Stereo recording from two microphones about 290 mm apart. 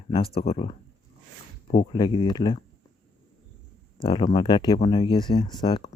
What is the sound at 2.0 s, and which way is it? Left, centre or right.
Speech, centre.